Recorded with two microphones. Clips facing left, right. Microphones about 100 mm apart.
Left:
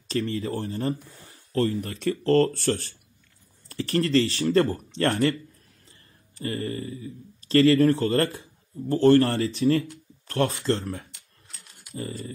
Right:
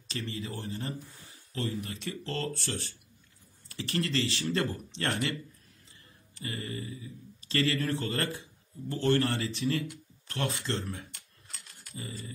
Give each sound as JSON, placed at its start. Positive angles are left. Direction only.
{"t": 0.1, "sound": "speech", "side_deg": 45}
{"t": 3.6, "sound": "speech", "side_deg": 40}
{"t": 6.4, "sound": "speech", "side_deg": 40}